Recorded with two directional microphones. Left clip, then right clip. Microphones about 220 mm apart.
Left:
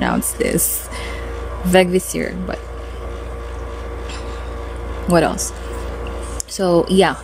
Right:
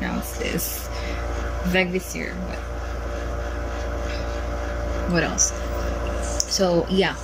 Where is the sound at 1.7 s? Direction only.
25° left (ahead or behind).